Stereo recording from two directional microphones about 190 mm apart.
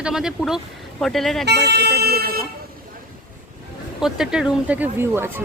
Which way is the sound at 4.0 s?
Centre (ahead or behind).